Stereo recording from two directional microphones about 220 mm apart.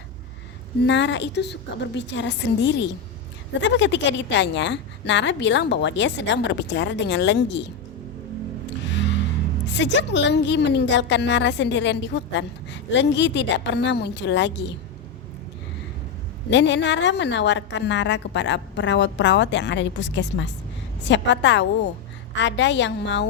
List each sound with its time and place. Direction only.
0.9 s a woman's voice: 55° left (ahead or behind)
9.7 s a woman's voice: 55° left (ahead or behind)
16.5 s a woman's voice: 55° left (ahead or behind)